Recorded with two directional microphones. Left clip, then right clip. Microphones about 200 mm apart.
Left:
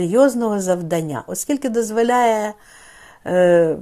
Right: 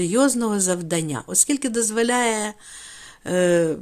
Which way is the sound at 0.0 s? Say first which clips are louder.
Left 5 dB; 30° right (ahead or behind).